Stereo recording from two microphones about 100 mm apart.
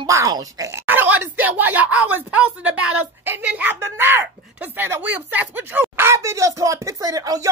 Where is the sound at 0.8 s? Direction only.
20° right (ahead or behind).